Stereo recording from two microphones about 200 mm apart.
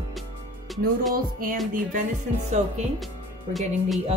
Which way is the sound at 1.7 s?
40° right (ahead or behind).